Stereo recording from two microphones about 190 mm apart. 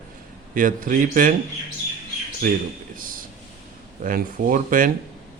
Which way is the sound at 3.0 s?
45° right (ahead or behind).